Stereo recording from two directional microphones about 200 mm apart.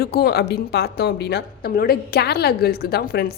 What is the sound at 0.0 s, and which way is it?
A woman's voice, 50° left (ahead or behind).